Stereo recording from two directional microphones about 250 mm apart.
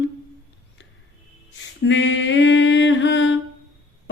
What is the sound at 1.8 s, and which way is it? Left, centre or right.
Mantra, left.